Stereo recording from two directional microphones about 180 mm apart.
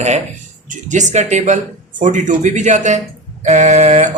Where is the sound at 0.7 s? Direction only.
45° right (ahead or behind).